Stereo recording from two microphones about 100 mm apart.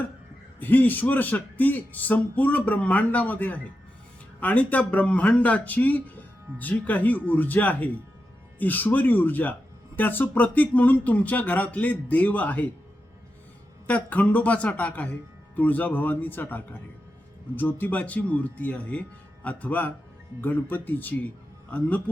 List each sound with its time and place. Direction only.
0.6 s speech: 20° left (ahead or behind)
13.8 s speech: 15° left (ahead or behind)